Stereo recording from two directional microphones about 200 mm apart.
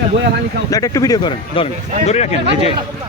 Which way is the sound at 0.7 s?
15° left (ahead or behind).